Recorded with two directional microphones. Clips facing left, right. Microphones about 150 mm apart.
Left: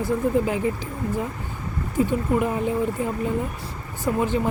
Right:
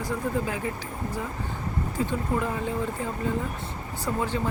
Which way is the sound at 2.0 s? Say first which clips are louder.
Left 7 dB; 15° left (ahead or behind).